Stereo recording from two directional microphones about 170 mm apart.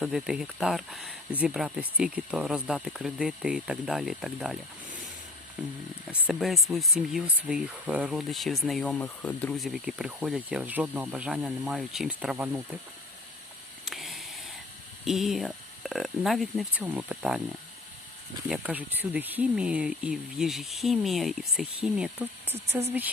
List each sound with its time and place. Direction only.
0.0 s speech: 5° right (ahead or behind)
13.8 s a sound: centre (ahead or behind)
15.0 s speech: centre (ahead or behind)
18.4 s speech: 5° right (ahead or behind)
22.5 s speech: 40° right (ahead or behind)